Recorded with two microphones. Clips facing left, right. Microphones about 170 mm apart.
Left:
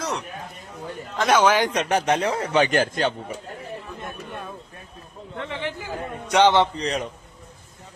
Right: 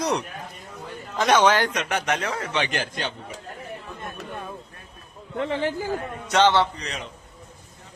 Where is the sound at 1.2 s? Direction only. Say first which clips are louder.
Even; 5° left (ahead or behind).